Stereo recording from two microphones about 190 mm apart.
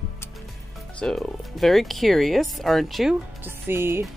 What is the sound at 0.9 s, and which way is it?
Speech, 5° left (ahead or behind).